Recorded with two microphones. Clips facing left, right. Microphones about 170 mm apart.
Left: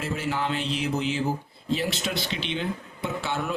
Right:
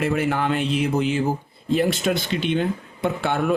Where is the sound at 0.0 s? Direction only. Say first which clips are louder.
Right 7 dB; 60° right (ahead or behind).